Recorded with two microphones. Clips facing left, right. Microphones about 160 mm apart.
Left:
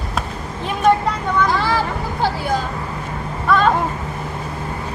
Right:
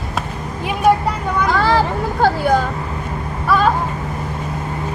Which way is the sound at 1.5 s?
50° right (ahead or behind).